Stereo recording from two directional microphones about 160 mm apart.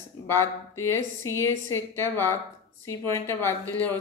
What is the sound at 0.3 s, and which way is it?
A woman's voice, 15° left (ahead or behind).